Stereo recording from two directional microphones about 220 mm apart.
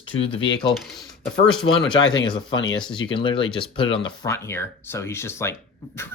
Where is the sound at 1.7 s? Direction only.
60° left (ahead or behind).